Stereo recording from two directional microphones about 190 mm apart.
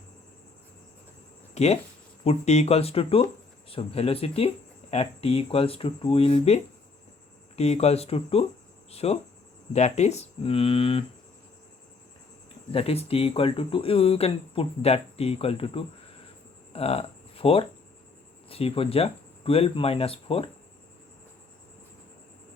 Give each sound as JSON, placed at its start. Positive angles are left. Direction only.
{"t": 1.5, "sound": "speech", "side_deg": 35}
{"t": 12.7, "sound": "speech", "side_deg": 30}
{"t": 16.7, "sound": "a sound", "side_deg": 30}
{"t": 18.4, "sound": "speech", "side_deg": 30}